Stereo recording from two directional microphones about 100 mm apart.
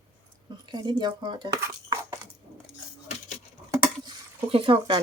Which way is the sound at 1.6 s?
30° right (ahead or behind).